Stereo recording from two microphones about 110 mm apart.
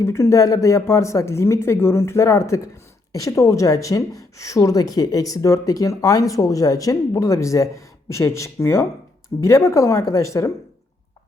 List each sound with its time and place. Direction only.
0.0 s speech: 25° left (ahead or behind)